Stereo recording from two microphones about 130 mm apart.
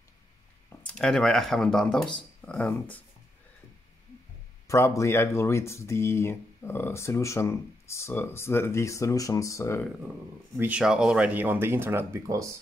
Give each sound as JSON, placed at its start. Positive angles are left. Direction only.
{"t": 0.9, "sound": "speech", "side_deg": 5}
{"t": 4.6, "sound": "speech", "side_deg": 20}
{"t": 10.6, "sound": "speech", "side_deg": -10}